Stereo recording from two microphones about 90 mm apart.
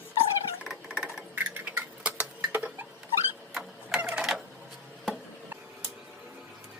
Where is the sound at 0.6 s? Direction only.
10° right (ahead or behind).